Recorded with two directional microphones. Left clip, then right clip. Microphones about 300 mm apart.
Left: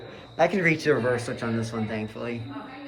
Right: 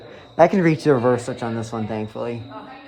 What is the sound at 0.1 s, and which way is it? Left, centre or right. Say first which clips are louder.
A man's voice: right 8 dB; right.